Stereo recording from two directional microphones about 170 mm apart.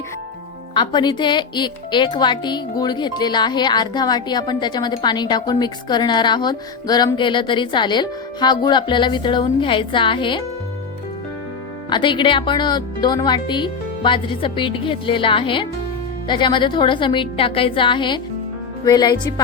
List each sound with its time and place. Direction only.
0.7 s speech: 25° left (ahead or behind)
11.9 s speech: 25° left (ahead or behind)